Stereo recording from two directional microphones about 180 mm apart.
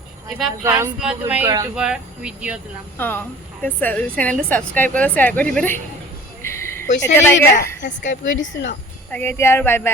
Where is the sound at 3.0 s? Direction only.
10° left (ahead or behind).